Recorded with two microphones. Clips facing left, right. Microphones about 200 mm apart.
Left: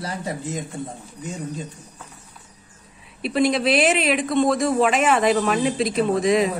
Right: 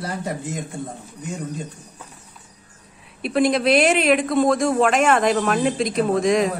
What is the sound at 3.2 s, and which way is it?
Speech, centre (ahead or behind).